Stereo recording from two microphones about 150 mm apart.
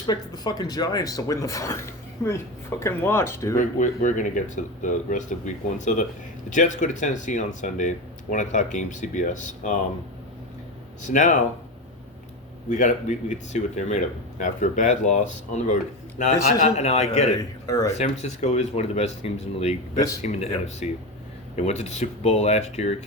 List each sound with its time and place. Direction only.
0.1 s speech: 25° left (ahead or behind)
3.6 s speech: 60° left (ahead or behind)
11.0 s speech: 55° left (ahead or behind)
12.7 s speech: 55° left (ahead or behind)
17.7 s speech: 25° left (ahead or behind)
18.0 s speech: 50° left (ahead or behind)